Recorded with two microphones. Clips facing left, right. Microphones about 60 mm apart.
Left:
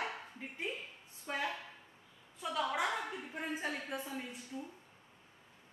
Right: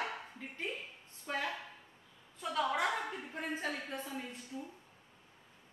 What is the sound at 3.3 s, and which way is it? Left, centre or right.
Speech, centre.